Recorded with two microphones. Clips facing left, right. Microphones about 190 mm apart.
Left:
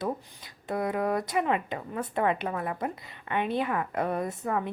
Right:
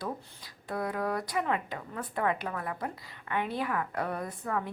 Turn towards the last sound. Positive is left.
turn(degrees=25)  # may be behind; listen again after turning